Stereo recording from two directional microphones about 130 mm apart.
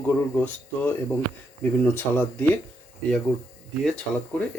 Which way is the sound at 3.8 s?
Centre (ahead or behind).